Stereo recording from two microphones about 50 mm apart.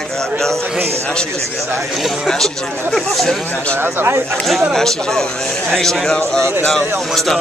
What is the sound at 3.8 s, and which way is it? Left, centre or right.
Speech, right.